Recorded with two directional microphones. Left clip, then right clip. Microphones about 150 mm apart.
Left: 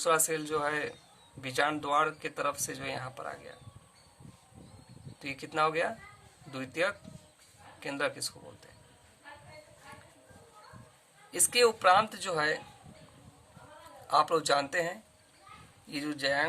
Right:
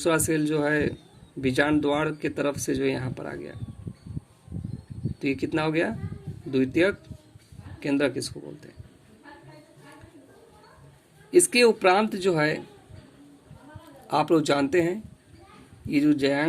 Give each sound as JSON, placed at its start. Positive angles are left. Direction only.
{"t": 0.0, "sound": "speech", "side_deg": -15}
{"t": 5.2, "sound": "speech", "side_deg": -15}
{"t": 11.3, "sound": "speech", "side_deg": -15}
{"t": 14.1, "sound": "speech", "side_deg": -15}